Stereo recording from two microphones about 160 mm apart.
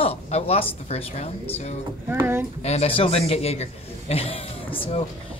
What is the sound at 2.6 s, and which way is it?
A man's voice, 40° left (ahead or behind).